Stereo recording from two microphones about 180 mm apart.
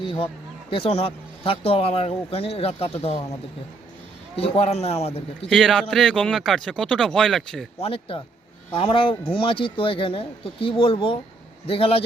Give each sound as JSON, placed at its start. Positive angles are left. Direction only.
{"t": 0.0, "sound": "a sound", "side_deg": 25}
{"t": 0.7, "sound": "speech", "side_deg": 30}
{"t": 4.4, "sound": "speech", "side_deg": 35}
{"t": 5.5, "sound": "speech", "side_deg": 0}
{"t": 7.8, "sound": "speech", "side_deg": 30}